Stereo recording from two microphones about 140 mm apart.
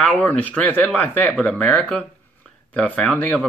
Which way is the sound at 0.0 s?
10° left (ahead or behind).